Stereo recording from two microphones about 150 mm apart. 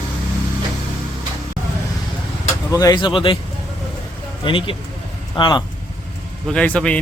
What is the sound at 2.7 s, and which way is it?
Speech, 25° left (ahead or behind).